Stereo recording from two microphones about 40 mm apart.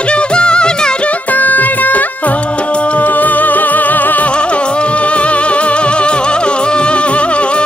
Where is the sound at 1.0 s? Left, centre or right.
Left.